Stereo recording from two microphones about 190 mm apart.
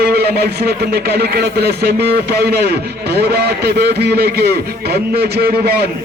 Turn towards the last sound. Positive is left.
turn(degrees=-55)  # may be behind; listen again after turning